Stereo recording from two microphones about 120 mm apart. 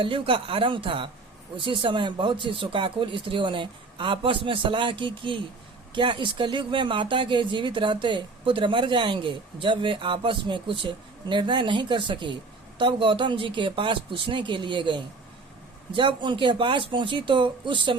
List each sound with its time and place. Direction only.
0.0 s speech: 45° right (ahead or behind)